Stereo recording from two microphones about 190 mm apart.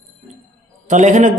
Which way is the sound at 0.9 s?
40° right (ahead or behind).